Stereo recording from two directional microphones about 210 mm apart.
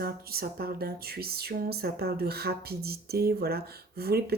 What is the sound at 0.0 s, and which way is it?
Speech, 45° right (ahead or behind).